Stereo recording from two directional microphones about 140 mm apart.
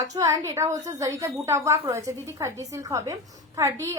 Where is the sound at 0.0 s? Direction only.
25° right (ahead or behind).